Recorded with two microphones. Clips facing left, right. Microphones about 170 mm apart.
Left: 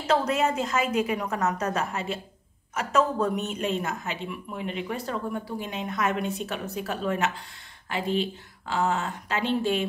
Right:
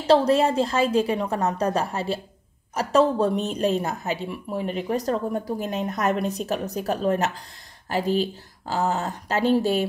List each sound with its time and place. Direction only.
0.0 s speech: 35° right (ahead or behind)